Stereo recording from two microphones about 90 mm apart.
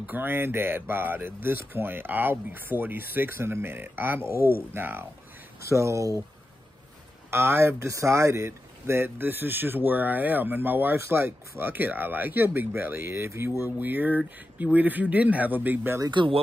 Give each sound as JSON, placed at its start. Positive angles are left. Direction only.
{"t": 0.0, "sound": "speech", "side_deg": -20}
{"t": 7.2, "sound": "speech", "side_deg": -25}
{"t": 16.1, "sound": "speech", "side_deg": -60}